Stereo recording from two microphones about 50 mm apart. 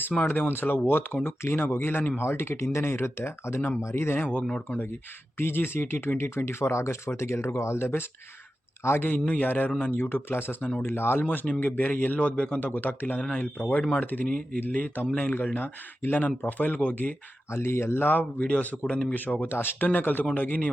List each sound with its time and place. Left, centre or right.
0.3 s speech: left
3.8 s speech: left
4.0 s speech: left
5.4 s speech: left
9.2 s a man's voice: left
11.3 s a man's voice: left
17.5 s speech: left
18.1 s a man's voice: left